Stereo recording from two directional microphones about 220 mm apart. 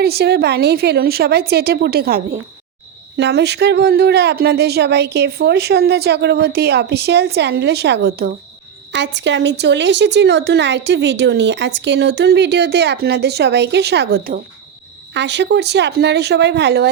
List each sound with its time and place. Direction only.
0.0 s speech: 45° right (ahead or behind)